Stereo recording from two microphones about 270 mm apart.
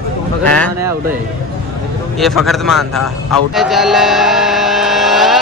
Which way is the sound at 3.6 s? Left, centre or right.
Centre.